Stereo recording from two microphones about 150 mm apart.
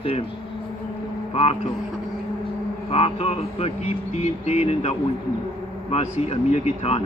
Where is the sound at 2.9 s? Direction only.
40° left (ahead or behind).